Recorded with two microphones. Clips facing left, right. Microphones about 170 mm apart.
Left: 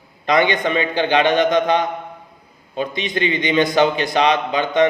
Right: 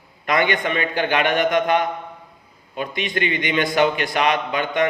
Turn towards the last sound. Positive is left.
turn(degrees=25)  # may be behind; listen again after turning